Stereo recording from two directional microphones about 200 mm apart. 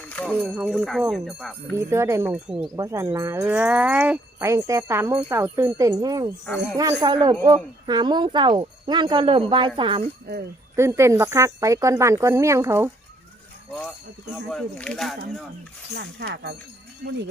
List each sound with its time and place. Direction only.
0.1 s a sound: 10° left (ahead or behind)
0.4 s speech: 10° right (ahead or behind)
1.7 s wind chime: 10° right (ahead or behind)
6.4 s speech: 10° left (ahead or behind)
6.7 s speech: 20° right (ahead or behind)
10.2 s speech: 55° right (ahead or behind)
10.8 s wind chime: 15° right (ahead or behind)
14.3 s speech: 5° left (ahead or behind)
16.0 s speech: 60° right (ahead or behind)